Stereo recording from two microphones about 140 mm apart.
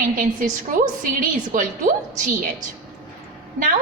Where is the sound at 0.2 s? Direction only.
75° right (ahead or behind).